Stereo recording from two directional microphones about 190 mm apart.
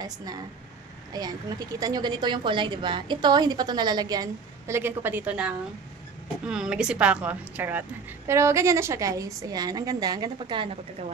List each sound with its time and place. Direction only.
0.0 s a woman's voice: 20° right (ahead or behind)